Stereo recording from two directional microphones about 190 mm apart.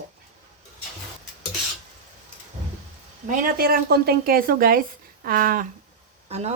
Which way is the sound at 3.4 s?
50° right (ahead or behind).